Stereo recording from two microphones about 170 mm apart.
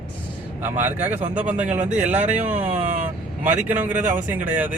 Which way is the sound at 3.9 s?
50° right (ahead or behind).